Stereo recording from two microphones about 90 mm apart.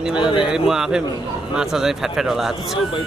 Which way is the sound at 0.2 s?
60° left (ahead or behind).